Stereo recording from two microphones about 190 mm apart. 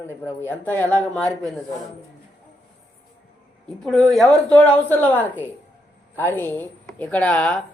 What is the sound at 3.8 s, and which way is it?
A man's voice, centre (ahead or behind).